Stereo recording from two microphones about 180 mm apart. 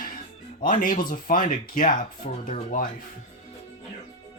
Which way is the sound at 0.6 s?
50° left (ahead or behind).